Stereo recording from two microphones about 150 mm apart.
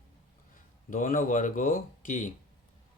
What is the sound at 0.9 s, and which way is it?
Speech, 65° left (ahead or behind).